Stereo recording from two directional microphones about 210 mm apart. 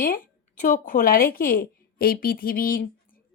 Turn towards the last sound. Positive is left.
turn(degrees=45)  # may be behind; listen again after turning